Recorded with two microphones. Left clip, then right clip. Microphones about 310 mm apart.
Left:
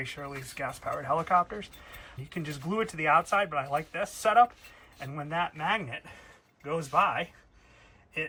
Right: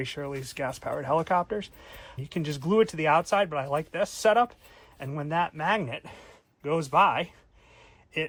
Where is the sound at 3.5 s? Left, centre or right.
Right.